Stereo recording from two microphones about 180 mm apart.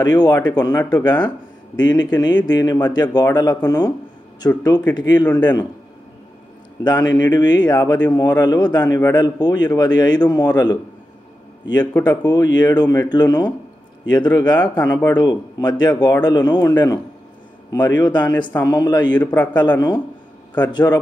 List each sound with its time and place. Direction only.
0.0 s speech: 20° left (ahead or behind)
6.8 s speech: 25° left (ahead or behind)
12.0 s speech: 20° left (ahead or behind)
14.6 s speech: 10° left (ahead or behind)
19.1 s a man's voice: 10° left (ahead or behind)
19.5 s speech: 25° left (ahead or behind)